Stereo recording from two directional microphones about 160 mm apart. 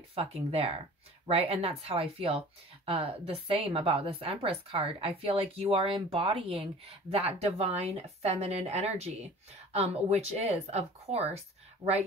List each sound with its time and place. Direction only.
0.1 s speech: 40° right (ahead or behind)